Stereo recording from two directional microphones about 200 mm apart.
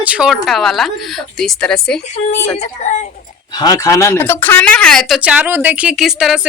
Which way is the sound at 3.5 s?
20° left (ahead or behind).